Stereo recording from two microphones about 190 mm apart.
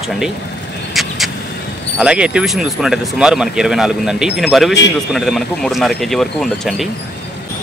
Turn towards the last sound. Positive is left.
turn(degrees=0)  # may be behind; listen again after turning